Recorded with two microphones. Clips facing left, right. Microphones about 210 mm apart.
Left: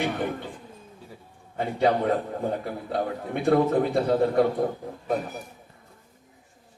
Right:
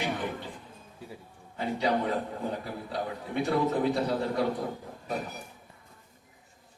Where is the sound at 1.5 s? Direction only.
55° left (ahead or behind).